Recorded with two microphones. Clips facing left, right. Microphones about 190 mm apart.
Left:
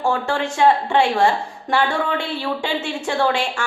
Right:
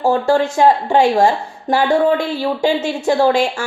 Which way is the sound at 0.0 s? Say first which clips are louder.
Right 7 dB; 40° right (ahead or behind).